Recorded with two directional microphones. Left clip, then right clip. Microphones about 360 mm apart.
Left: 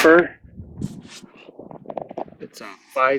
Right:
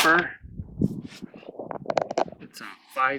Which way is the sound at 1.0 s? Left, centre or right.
Centre.